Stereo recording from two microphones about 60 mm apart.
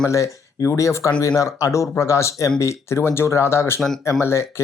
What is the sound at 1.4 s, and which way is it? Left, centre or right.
Speech, left.